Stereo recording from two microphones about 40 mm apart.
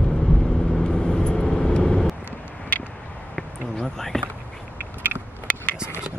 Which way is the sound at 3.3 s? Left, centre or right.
Centre.